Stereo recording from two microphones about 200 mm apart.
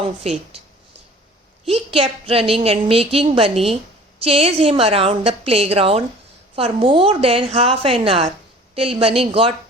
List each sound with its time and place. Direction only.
0.2 s speech: 30° right (ahead or behind)
1.7 s a woman's voice: 30° right (ahead or behind)